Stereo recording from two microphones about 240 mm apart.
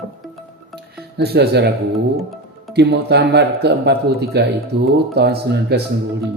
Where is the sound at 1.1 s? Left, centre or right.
Right.